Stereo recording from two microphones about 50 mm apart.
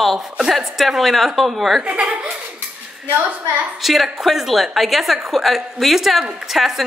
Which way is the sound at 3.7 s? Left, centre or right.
Centre.